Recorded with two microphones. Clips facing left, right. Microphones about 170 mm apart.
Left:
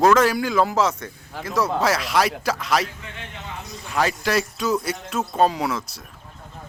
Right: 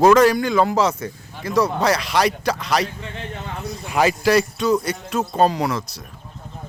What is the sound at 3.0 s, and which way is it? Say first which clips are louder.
Music: right 6 dB; 35° right (ahead or behind).